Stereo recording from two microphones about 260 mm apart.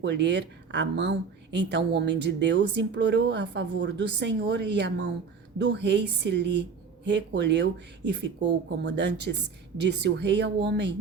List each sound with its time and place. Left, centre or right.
0.0 s speech: right